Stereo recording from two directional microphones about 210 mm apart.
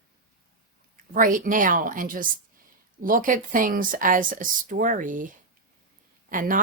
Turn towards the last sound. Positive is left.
turn(degrees=-40)  # may be behind; listen again after turning